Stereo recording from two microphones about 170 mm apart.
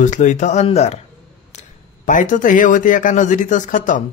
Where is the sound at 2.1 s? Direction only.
50° left (ahead or behind).